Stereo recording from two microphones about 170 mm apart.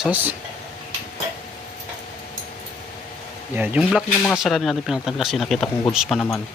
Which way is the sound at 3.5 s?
10° right (ahead or behind).